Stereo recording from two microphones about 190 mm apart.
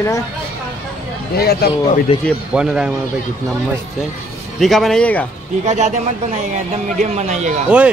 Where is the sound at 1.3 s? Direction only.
55° left (ahead or behind).